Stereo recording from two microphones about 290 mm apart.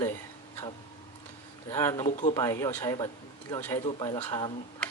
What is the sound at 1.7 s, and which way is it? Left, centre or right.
Speech, centre.